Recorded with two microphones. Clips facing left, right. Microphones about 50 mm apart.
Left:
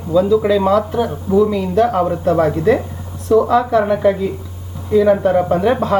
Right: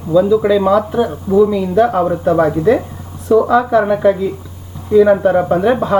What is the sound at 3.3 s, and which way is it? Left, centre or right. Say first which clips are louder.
Speech: right 2 dB; centre.